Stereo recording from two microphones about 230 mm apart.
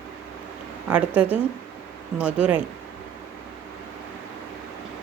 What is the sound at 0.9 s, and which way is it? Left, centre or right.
Speech, centre.